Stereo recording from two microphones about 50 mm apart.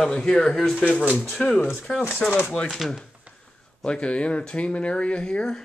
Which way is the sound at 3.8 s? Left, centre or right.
Left.